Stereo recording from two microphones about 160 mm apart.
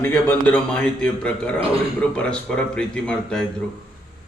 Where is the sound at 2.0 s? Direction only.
5° left (ahead or behind).